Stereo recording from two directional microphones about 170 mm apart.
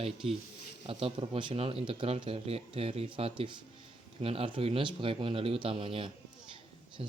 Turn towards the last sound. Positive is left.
turn(degrees=-35)  # may be behind; listen again after turning